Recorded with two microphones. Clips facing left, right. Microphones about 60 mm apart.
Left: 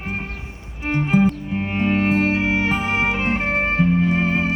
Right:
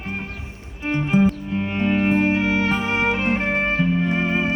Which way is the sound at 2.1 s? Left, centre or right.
Centre.